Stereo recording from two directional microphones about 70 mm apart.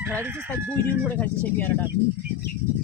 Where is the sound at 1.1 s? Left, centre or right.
Left.